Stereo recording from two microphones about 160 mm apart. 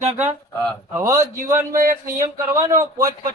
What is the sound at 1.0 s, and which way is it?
Speech, 20° right (ahead or behind).